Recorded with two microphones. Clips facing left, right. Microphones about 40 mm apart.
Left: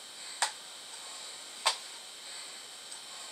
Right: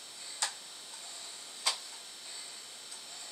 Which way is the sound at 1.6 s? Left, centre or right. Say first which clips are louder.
Left 4 dB; left.